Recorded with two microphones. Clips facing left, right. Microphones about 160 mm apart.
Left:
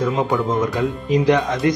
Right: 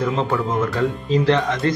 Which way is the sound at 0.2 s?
15° left (ahead or behind).